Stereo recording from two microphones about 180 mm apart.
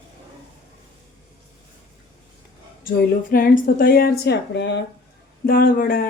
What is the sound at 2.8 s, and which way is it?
Speech, 55° left (ahead or behind).